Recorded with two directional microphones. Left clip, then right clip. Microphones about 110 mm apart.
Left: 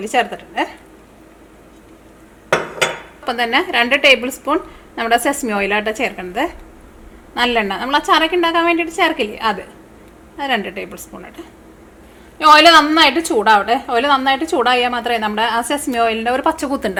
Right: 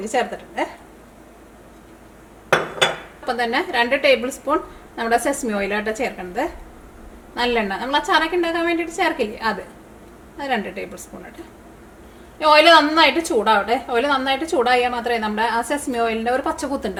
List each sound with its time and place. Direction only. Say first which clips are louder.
0.0 s a woman's voice: left 4 dB; 25° left (ahead or behind)
3.2 s a woman's voice: left 4 dB; 30° left (ahead or behind)
12.4 s a woman's voice: left 4 dB; 20° left (ahead or behind)